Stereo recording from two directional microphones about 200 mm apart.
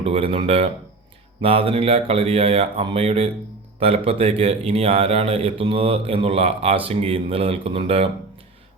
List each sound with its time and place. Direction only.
0.0 s a man's voice: 30° right (ahead or behind)